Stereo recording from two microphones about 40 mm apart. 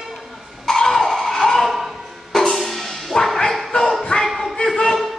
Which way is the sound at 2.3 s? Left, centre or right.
Centre.